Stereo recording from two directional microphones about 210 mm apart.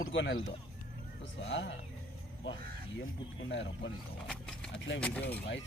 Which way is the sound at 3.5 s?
60° left (ahead or behind).